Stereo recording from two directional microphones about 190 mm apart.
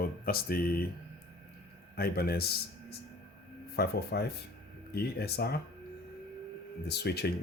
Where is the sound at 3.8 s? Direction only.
55° left (ahead or behind).